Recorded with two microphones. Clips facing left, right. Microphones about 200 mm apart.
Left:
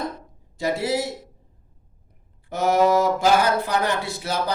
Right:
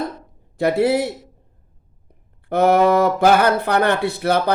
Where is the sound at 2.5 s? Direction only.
60° right (ahead or behind).